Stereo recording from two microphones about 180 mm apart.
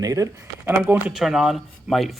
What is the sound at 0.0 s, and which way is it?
Speech, 20° right (ahead or behind).